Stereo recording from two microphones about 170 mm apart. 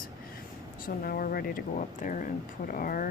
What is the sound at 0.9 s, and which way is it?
Speech, 60° left (ahead or behind).